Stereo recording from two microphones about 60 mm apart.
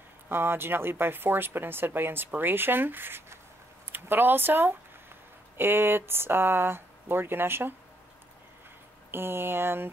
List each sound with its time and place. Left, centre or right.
0.3 s speech: right
9.1 s speech: right